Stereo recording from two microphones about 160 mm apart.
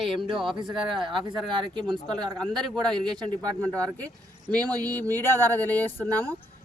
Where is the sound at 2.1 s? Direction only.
5° left (ahead or behind).